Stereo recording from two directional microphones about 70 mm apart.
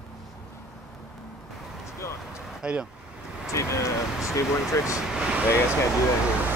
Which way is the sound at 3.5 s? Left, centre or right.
Left.